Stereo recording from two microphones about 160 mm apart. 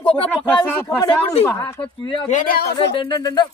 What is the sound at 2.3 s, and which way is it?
Speech, 55° left (ahead or behind).